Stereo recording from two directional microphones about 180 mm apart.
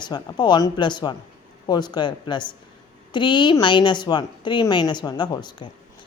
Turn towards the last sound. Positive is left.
turn(degrees=25)  # may be behind; listen again after turning